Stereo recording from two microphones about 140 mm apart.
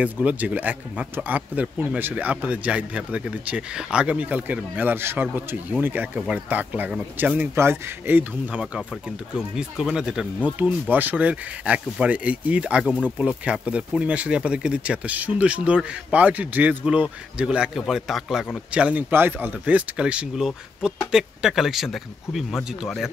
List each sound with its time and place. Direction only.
0.0 s speech: 10° right (ahead or behind)